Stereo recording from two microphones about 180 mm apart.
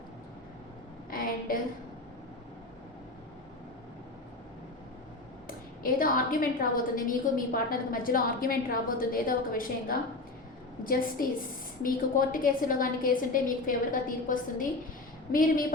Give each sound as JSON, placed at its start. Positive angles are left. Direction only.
{"t": 5.5, "sound": "a woman's voice", "side_deg": 50}